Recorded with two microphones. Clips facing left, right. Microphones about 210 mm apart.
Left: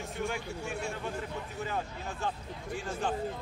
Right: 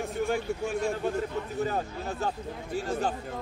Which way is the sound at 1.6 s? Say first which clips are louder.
Right 6 dB; 40° right (ahead or behind).